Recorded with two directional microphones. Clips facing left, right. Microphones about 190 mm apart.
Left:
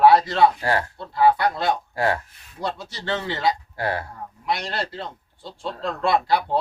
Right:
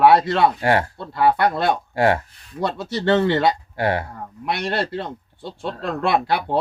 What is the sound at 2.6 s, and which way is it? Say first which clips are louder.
Speech: right 7 dB; 60° right (ahead or behind).